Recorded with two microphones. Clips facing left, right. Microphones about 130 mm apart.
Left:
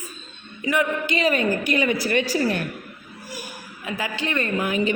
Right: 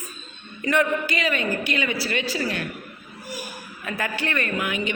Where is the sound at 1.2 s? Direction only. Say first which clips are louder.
Left 4 dB; 40° left (ahead or behind).